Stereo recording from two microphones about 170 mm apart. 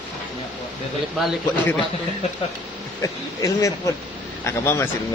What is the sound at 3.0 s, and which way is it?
Speech, 20° left (ahead or behind).